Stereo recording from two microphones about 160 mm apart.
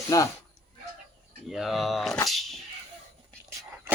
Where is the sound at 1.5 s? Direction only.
Centre (ahead or behind).